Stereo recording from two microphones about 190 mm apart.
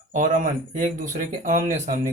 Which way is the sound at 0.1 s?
45° right (ahead or behind).